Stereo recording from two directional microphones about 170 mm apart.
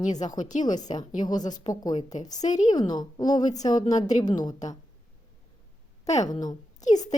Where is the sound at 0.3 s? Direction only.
45° left (ahead or behind).